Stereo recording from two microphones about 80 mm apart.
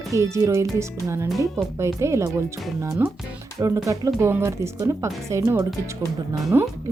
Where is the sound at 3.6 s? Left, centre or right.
Right.